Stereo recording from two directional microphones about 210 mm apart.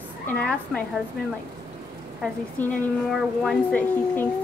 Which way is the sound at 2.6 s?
5° left (ahead or behind).